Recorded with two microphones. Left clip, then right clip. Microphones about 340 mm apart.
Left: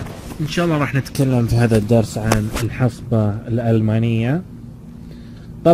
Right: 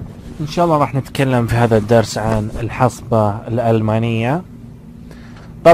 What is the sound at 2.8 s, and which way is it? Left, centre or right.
Speech, right.